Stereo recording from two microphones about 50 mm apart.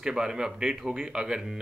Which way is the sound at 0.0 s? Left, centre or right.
Centre.